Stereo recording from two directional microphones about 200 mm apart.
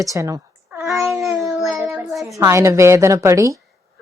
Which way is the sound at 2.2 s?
15° right (ahead or behind).